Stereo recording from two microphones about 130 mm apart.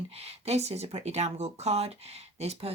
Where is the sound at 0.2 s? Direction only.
55° right (ahead or behind).